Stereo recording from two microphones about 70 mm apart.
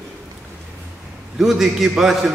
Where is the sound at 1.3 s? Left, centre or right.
Centre.